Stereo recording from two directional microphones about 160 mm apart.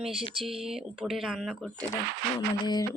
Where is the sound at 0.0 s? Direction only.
Centre (ahead or behind).